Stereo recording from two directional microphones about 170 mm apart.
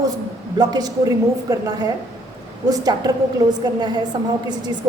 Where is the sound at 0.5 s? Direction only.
25° right (ahead or behind).